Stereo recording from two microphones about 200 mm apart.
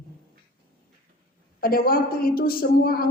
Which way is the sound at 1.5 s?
50° left (ahead or behind).